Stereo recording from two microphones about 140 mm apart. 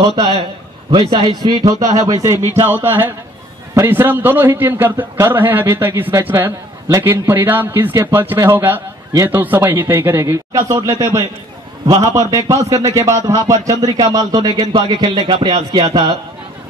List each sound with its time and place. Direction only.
0.0 s a man's voice: 30° right (ahead or behind)
2.5 s a man's voice: 15° right (ahead or behind)